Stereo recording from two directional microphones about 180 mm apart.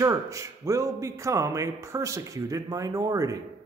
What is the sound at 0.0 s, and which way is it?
A man's voice, 15° right (ahead or behind).